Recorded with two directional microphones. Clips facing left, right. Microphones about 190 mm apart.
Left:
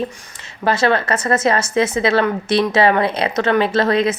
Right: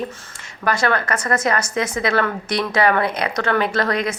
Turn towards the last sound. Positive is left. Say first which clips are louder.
# left 5 dB
turn(degrees=25)  # may be behind; listen again after turning